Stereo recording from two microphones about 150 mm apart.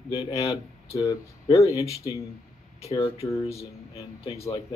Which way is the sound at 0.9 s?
20° left (ahead or behind).